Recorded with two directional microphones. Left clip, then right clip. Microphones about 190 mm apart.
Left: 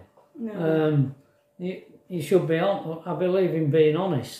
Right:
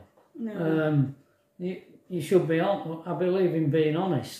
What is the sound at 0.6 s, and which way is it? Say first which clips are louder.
Speech: left 3 dB; 20° left (ahead or behind).